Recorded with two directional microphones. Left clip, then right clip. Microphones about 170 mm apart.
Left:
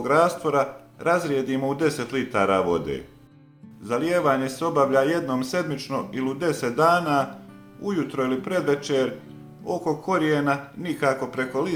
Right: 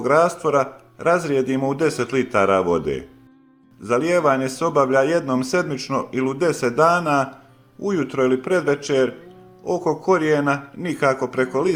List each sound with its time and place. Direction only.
0.0 s a man's voice: 40° right (ahead or behind)